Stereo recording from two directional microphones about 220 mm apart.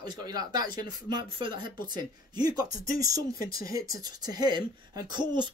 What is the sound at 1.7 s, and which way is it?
Speech, 40° left (ahead or behind).